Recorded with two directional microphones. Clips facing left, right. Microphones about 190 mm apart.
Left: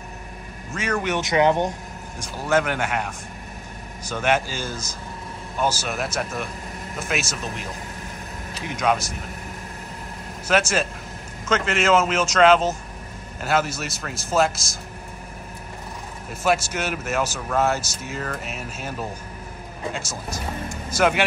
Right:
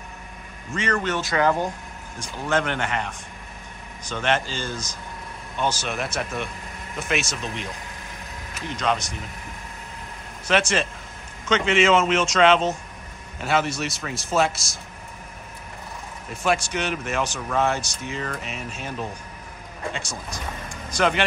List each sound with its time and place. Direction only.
0.7 s speech: 5° left (ahead or behind)
2.1 s a man's voice: 5° left (ahead or behind)
8.6 s speech: 10° left (ahead or behind)
10.4 s a man's voice: 5° left (ahead or behind)
16.3 s a man's voice: 5° left (ahead or behind)